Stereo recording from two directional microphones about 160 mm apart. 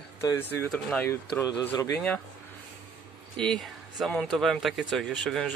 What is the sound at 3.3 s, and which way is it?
Speech, 5° left (ahead or behind).